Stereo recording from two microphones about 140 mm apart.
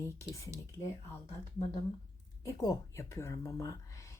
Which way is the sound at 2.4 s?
25° left (ahead or behind).